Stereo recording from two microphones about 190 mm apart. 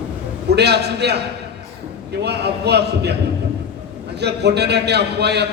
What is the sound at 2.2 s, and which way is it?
Speech, 60° right (ahead or behind).